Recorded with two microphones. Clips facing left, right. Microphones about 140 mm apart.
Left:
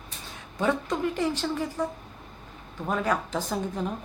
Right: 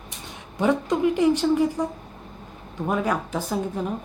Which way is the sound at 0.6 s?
15° right (ahead or behind).